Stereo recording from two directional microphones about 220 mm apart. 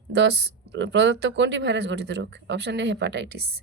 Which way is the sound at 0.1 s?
50° right (ahead or behind).